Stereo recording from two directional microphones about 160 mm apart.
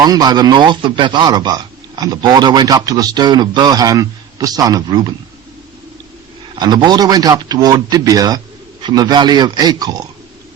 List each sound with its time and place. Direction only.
0.0 s speech: 25° right (ahead or behind)
6.6 s speech: 25° right (ahead or behind)